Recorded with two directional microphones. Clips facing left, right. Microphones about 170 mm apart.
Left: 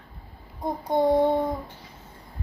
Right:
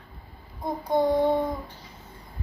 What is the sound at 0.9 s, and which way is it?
Child singing, 20° left (ahead or behind).